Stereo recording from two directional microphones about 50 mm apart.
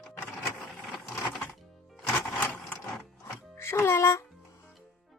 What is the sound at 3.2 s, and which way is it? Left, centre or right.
Music, left.